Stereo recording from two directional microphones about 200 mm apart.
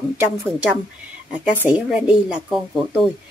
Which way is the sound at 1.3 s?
5° right (ahead or behind).